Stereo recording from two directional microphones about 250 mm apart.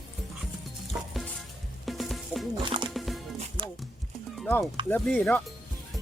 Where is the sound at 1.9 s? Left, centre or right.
Centre.